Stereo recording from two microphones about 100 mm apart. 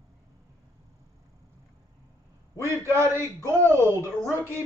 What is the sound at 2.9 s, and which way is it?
Speech, 25° right (ahead or behind).